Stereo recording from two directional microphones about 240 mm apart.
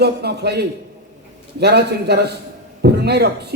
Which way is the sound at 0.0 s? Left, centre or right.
Right.